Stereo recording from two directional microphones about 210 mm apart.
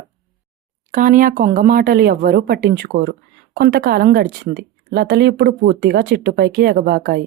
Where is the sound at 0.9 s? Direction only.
40° right (ahead or behind).